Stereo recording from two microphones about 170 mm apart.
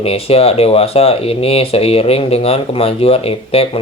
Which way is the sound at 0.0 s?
35° left (ahead or behind).